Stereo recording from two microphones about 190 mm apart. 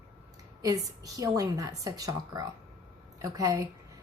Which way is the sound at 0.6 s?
20° right (ahead or behind).